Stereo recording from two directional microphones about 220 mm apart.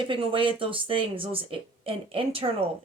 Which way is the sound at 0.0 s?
25° right (ahead or behind).